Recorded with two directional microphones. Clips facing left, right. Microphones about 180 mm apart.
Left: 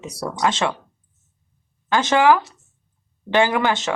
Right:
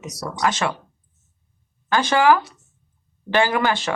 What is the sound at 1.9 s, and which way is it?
Speech, 20° left (ahead or behind).